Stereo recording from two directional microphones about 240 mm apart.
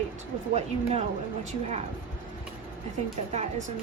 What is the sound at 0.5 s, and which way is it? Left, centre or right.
A woman's voice, right.